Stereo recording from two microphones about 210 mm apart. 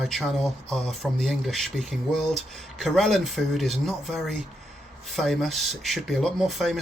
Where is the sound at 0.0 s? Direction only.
Centre (ahead or behind).